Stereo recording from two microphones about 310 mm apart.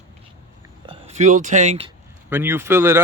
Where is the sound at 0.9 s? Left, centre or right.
Right.